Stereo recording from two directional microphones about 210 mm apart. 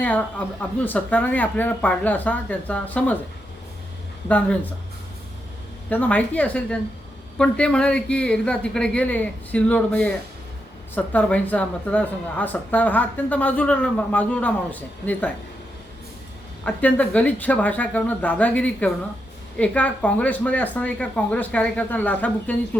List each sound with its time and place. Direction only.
0.0 s speech: 5° left (ahead or behind)
4.3 s speech: 5° left (ahead or behind)
5.9 s speech: 5° left (ahead or behind)
16.6 s speech: 5° left (ahead or behind)